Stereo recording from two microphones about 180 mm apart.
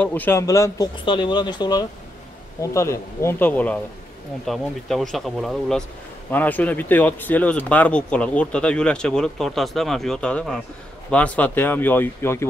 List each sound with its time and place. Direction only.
0.0 s speech: 10° left (ahead or behind)